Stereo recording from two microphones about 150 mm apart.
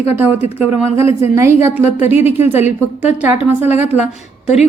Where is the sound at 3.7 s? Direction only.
45° left (ahead or behind).